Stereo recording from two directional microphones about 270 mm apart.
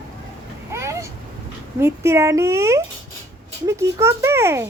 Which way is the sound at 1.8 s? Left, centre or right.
Centre.